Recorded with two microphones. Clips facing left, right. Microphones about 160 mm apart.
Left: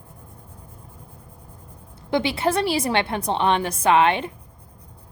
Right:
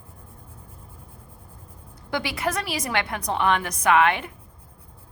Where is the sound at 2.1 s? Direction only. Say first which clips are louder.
Left 6 dB; 25° left (ahead or behind).